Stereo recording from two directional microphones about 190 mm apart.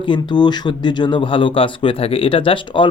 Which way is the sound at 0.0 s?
25° left (ahead or behind).